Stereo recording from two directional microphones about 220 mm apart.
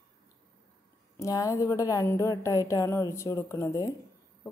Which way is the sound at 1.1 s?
15° left (ahead or behind).